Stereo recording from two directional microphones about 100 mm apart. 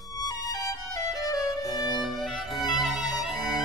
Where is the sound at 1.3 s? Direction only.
40° left (ahead or behind).